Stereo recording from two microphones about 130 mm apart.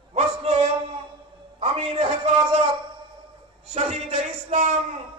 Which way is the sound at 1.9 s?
40° right (ahead or behind).